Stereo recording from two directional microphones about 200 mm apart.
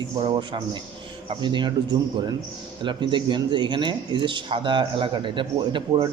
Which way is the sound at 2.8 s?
25° right (ahead or behind).